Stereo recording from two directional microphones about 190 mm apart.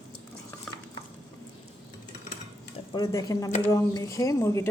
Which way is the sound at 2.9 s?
20° left (ahead or behind).